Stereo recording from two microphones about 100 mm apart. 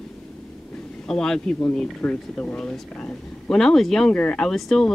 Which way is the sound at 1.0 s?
5° left (ahead or behind).